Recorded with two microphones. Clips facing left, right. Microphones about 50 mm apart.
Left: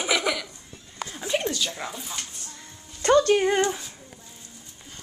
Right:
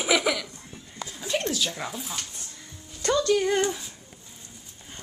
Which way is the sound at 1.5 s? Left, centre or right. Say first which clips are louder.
Even; centre.